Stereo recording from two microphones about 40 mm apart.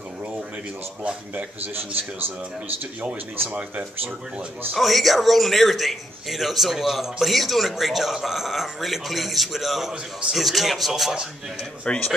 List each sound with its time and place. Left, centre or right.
1.3 s a man's voice: right
4.7 s a man's voice: centre
11.8 s speech: left